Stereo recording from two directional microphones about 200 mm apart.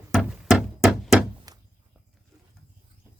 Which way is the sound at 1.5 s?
20° right (ahead or behind).